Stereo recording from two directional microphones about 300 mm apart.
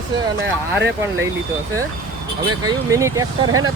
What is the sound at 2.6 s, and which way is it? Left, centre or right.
Speech, centre.